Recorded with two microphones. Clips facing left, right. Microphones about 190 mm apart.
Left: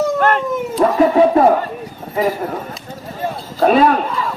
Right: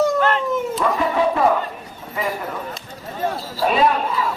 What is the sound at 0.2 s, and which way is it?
Dog, 50° left (ahead or behind).